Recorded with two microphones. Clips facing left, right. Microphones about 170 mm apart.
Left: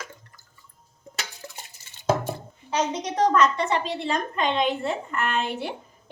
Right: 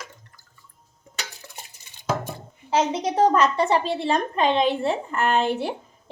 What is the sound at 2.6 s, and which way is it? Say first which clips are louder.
A woman's voice: right 4 dB; 30° right (ahead or behind).